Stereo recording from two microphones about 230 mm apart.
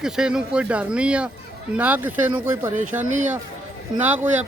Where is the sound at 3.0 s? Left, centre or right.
Right.